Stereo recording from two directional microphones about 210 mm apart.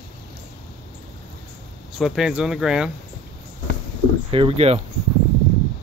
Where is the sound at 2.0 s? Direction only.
Centre (ahead or behind).